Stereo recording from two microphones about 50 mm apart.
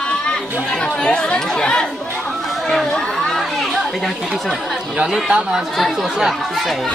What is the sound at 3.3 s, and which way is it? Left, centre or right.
Children playing, centre.